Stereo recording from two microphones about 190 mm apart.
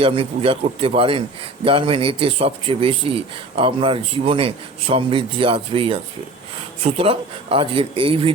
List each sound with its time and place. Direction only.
0.0 s a man's voice: 30° right (ahead or behind)